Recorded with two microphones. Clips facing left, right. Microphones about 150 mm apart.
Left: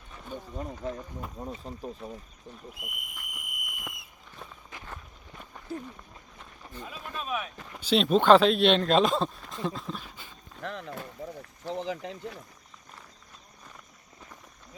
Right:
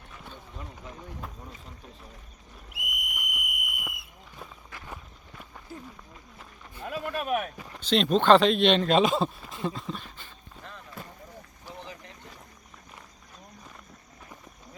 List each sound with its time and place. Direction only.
0.6 s speech: 40° left (ahead or behind)
2.7 s speech: 85° right
3.2 s a sound: 80° right
4.7 s walk: 20° left (ahead or behind)
6.8 s speech: 65° right (ahead or behind)
7.8 s speech: 5° left (ahead or behind)
10.6 s a sound: 80° left
11.7 s speech: 90° left